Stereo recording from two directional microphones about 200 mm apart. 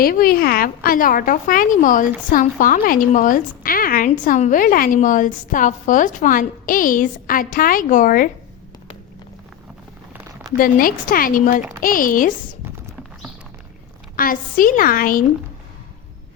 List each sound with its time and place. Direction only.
0.0 s a woman's voice: 45° left (ahead or behind)
10.1 s a sound: 10° right (ahead or behind)
10.6 s a woman's voice: 45° left (ahead or behind)
14.2 s a woman's voice: 45° left (ahead or behind)